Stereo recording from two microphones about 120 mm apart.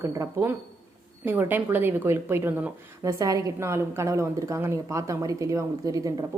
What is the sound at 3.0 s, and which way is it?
A woman's voice, 30° right (ahead or behind).